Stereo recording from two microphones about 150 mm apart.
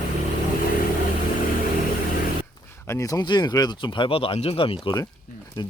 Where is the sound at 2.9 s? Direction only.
20° left (ahead or behind).